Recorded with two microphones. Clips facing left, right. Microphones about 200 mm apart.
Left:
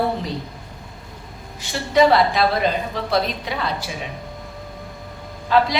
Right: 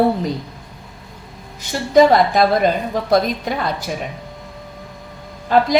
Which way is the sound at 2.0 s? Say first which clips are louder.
Right 4 dB; 45° right (ahead or behind).